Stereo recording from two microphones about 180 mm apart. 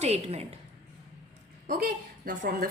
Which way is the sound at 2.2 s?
55° right (ahead or behind).